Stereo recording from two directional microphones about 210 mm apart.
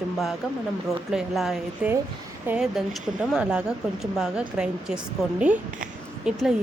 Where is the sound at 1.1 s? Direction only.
Centre (ahead or behind).